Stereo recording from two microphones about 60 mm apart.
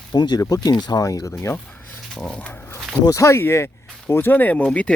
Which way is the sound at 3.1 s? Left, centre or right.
Left.